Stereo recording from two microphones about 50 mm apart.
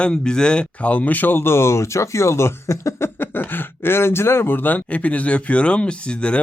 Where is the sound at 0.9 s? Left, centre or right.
Left.